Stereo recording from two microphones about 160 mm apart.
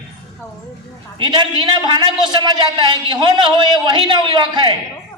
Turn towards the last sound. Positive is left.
turn(degrees=-30)  # may be behind; listen again after turning